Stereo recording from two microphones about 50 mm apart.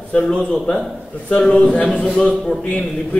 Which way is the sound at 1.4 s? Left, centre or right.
Centre.